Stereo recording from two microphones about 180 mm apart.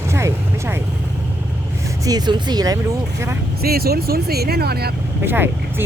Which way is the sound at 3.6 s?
55° right (ahead or behind).